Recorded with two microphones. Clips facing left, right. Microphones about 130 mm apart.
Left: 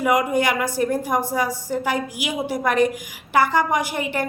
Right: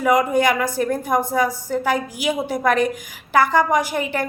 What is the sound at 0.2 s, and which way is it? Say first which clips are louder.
Speech: right 3 dB; 45° right (ahead or behind).